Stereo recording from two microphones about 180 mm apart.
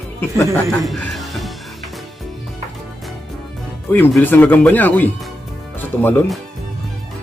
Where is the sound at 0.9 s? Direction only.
Centre (ahead or behind).